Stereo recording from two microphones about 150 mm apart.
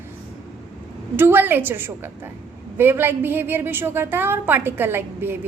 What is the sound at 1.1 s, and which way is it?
A woman's voice, 15° right (ahead or behind).